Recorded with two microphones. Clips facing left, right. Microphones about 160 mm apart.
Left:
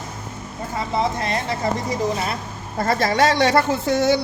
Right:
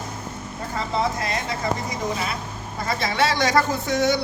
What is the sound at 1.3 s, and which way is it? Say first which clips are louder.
Speech: left 3 dB; 35° left (ahead or behind).